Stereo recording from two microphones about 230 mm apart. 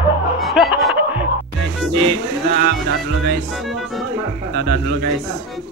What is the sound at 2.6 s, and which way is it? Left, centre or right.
Music, right.